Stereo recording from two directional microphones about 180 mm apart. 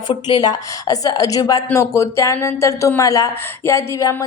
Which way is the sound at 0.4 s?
20° left (ahead or behind).